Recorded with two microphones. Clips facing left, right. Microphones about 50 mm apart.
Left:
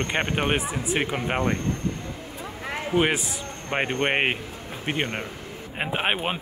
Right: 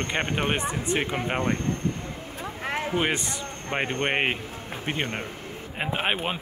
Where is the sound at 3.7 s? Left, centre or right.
Left.